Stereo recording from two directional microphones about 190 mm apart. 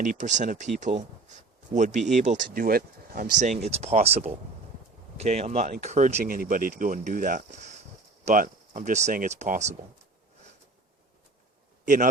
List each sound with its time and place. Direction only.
0.0 s speech: 40° right (ahead or behind)
3.6 s speech: 35° right (ahead or behind)
11.9 s speech: 45° right (ahead or behind)